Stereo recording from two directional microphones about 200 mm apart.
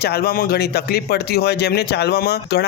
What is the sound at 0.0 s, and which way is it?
Speech, 50° left (ahead or behind).